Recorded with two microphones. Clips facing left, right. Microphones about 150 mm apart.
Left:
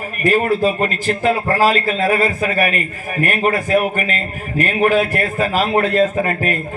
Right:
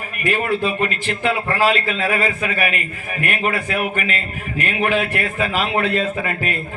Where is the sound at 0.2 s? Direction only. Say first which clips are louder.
Left 5 dB; 40° left (ahead or behind).